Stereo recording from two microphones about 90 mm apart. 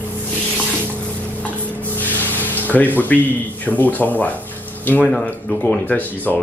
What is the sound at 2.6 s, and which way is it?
Speech, 20° left (ahead or behind).